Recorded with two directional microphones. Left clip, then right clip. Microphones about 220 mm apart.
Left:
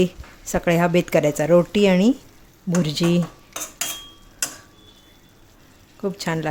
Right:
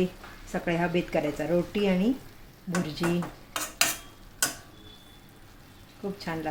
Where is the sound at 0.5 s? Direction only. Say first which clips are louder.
Left 9 dB; 55° left (ahead or behind).